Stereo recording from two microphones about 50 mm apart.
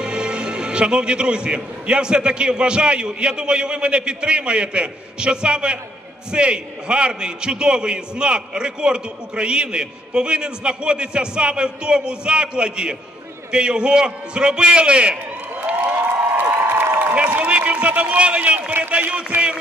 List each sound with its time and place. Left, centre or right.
0.0 s a man's voice: centre
16.3 s a sound: right
17.1 s a man's voice: right